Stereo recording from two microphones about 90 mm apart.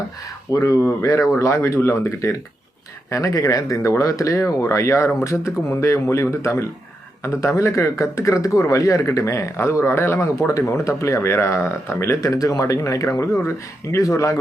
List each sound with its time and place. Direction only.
0.5 s a man's voice: 40° left (ahead or behind)
0.8 s a man's voice: 30° left (ahead or behind)
12.3 s a man's voice: 40° left (ahead or behind)